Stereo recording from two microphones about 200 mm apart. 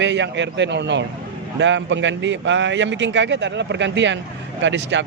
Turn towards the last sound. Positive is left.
turn(degrees=-65)  # may be behind; listen again after turning